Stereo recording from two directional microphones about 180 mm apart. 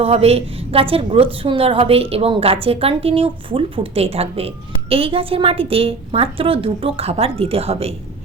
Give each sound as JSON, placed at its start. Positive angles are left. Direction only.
{"t": 0.0, "sound": "a woman's voice", "side_deg": -35}